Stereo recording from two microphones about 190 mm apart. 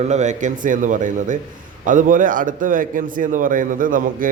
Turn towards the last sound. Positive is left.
turn(degrees=-45)  # may be behind; listen again after turning